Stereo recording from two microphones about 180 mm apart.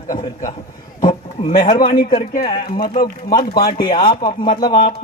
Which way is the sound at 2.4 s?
30° left (ahead or behind).